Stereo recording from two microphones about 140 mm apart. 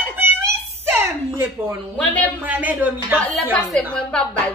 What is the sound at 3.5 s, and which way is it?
A woman's voice, 5° left (ahead or behind).